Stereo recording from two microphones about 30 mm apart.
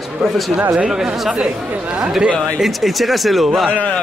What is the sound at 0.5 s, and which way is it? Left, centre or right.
Speech, right.